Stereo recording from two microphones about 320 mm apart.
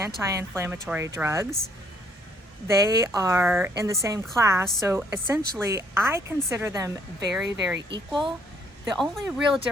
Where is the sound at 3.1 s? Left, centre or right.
Centre.